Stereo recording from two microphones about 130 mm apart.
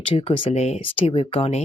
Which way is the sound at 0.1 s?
45° left (ahead or behind).